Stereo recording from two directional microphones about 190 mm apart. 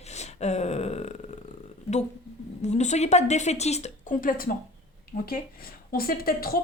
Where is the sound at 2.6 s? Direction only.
40° left (ahead or behind).